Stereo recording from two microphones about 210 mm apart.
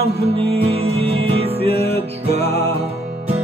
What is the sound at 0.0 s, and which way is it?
Music, 25° right (ahead or behind).